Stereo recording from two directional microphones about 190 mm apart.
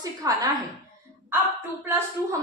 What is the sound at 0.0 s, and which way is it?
Speech, 20° right (ahead or behind).